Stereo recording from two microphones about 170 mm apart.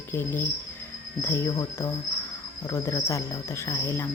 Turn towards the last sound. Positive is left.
turn(degrees=15)  # may be behind; listen again after turning